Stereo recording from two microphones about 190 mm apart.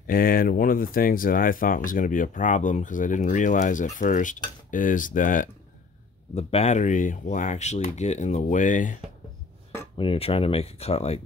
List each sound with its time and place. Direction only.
0.0 s speech: 50° left (ahead or behind)
9.9 s speech: 30° left (ahead or behind)